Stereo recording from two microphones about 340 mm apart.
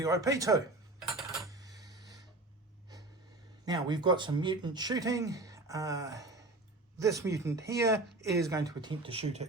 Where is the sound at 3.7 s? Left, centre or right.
Centre.